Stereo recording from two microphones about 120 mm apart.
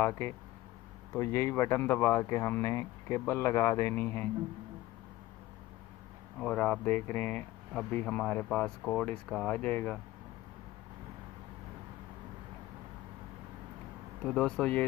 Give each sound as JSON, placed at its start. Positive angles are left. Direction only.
{"t": 0.0, "sound": "speech", "side_deg": 20}
{"t": 6.4, "sound": "speech", "side_deg": 5}
{"t": 14.2, "sound": "speech", "side_deg": 5}